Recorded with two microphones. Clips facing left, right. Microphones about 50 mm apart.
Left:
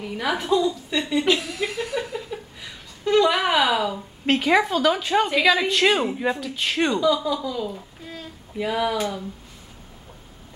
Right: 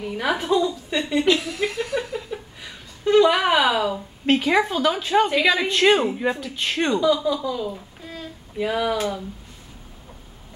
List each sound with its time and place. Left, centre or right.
0.2 s a woman's voice: centre
1.5 s chuckle: centre
2.0 s a sound: centre
4.4 s a woman's voice: centre